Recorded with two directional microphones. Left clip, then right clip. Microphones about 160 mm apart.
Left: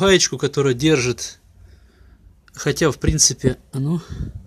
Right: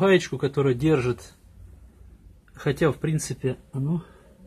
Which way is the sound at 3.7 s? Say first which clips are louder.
Left 5 dB; 45° left (ahead or behind).